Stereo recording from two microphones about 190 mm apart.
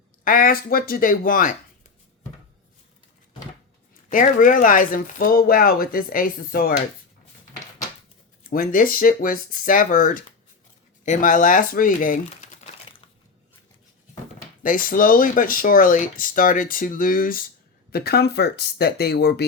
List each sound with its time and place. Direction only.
0.3 s speech: 45° left (ahead or behind)
4.1 s speech: 45° left (ahead or behind)
8.4 s speech: 50° left (ahead or behind)
14.6 s speech: 45° left (ahead or behind)